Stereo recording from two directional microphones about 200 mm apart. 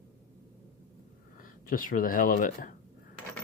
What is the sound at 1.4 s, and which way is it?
Speech, 45° left (ahead or behind).